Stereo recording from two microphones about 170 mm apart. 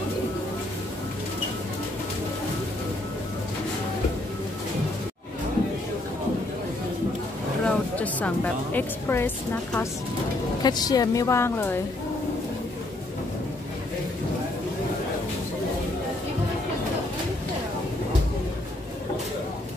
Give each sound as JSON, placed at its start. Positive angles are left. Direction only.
{"t": 7.6, "sound": "vehicle", "side_deg": 10}
{"t": 8.7, "sound": "a woman's voice", "side_deg": 10}
{"t": 10.6, "sound": "a woman's voice", "side_deg": 25}